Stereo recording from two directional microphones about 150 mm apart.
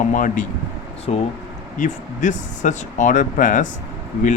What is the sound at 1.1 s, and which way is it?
Speech, 45° left (ahead or behind).